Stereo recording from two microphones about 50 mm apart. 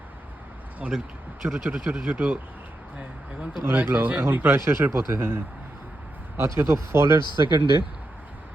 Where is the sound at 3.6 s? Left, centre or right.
Right.